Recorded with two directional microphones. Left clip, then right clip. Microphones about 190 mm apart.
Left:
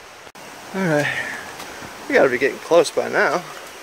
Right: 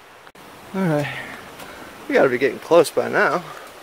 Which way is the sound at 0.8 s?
5° right (ahead or behind).